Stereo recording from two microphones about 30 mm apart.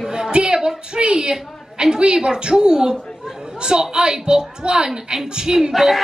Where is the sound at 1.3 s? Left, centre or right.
Right.